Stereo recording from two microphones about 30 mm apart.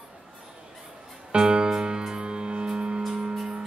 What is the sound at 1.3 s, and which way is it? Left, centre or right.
Music, right.